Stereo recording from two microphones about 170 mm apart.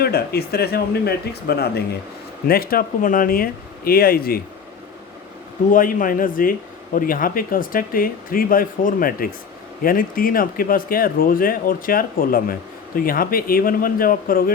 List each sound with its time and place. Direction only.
0.0 s speech: 65° left (ahead or behind)
2.5 s speech: 60° left (ahead or behind)
5.7 s speech: 55° left (ahead or behind)